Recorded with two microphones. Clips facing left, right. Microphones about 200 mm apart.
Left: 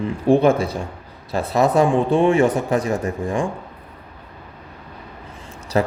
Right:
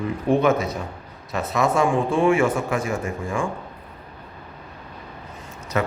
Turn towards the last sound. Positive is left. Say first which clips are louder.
# left 4 dB
turn(degrees=30)  # may be behind; listen again after turning